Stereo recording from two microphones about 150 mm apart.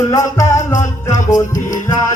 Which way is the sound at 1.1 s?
60° left (ahead or behind).